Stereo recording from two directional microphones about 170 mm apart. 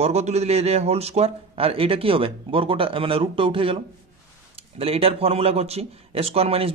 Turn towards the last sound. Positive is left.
turn(degrees=-35)  # may be behind; listen again after turning